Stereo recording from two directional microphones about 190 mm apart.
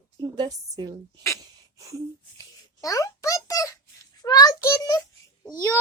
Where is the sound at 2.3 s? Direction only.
20° left (ahead or behind).